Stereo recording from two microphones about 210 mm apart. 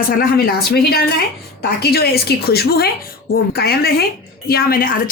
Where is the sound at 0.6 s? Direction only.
50° left (ahead or behind).